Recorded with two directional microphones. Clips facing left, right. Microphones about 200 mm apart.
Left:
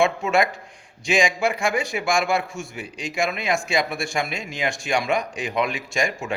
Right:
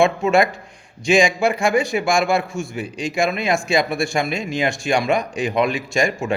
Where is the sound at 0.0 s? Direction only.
30° right (ahead or behind).